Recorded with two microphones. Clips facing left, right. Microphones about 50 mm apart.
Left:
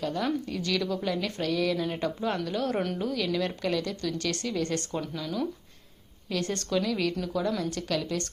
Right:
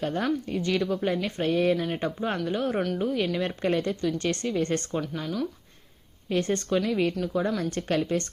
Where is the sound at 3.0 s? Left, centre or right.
Right.